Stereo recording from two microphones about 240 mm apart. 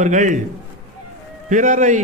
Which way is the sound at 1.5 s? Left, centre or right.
Right.